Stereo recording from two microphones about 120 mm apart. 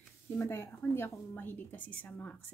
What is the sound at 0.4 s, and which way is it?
A woman's voice, 20° left (ahead or behind).